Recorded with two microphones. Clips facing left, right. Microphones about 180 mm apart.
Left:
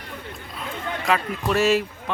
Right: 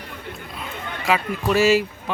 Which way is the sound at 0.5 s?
5° right (ahead or behind).